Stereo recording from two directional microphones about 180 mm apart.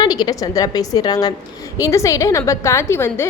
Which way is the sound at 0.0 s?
25° left (ahead or behind).